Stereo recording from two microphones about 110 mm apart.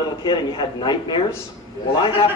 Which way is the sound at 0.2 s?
45° left (ahead or behind).